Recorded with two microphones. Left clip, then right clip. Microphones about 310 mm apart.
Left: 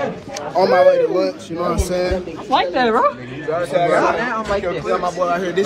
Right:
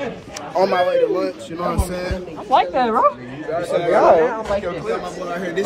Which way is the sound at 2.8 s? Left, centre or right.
Centre.